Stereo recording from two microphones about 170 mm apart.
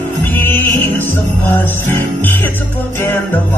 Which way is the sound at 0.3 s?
15° left (ahead or behind).